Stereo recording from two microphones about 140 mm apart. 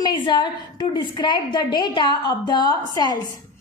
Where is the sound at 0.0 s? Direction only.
30° left (ahead or behind).